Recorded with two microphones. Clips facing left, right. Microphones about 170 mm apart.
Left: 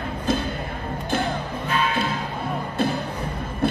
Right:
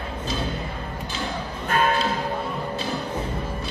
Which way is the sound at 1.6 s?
50° right (ahead or behind).